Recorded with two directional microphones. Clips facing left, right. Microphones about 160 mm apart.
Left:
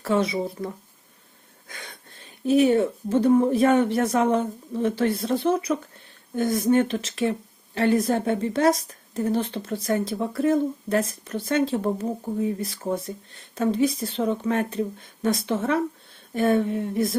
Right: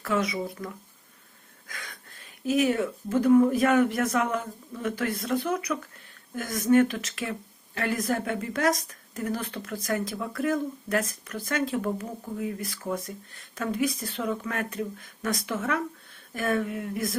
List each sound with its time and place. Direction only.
0.0 s a woman's voice: 30° left (ahead or behind)